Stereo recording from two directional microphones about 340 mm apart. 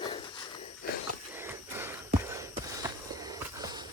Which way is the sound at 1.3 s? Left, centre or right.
Centre.